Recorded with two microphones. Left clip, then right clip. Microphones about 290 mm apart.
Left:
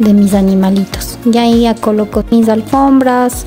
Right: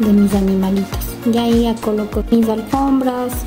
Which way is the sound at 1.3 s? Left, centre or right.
Left.